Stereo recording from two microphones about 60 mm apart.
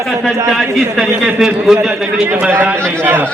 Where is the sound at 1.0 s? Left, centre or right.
Centre.